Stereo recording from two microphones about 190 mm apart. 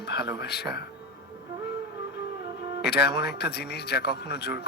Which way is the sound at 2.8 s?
60° left (ahead or behind).